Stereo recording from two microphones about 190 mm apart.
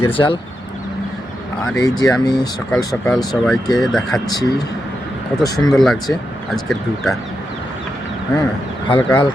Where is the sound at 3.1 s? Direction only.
Centre (ahead or behind).